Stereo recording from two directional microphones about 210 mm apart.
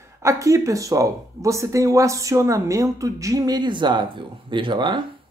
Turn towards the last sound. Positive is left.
turn(degrees=-20)  # may be behind; listen again after turning